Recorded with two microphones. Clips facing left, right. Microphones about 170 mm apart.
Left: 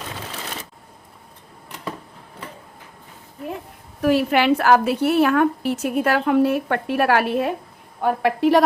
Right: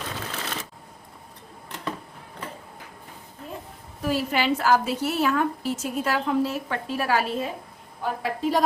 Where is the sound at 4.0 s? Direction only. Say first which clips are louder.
Left 7 dB; 65° left (ahead or behind).